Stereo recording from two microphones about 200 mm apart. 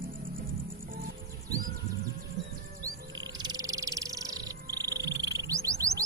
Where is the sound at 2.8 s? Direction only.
20° right (ahead or behind).